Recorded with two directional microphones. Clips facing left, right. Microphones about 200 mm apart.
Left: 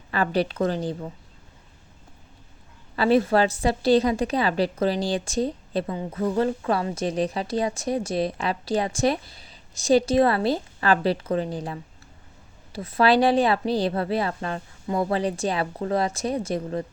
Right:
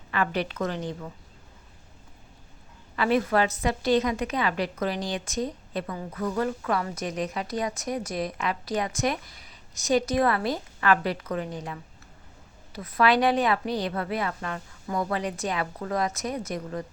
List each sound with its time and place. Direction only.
0.1 s a woman's voice: 35° left (ahead or behind)
2.9 s a woman's voice: 30° left (ahead or behind)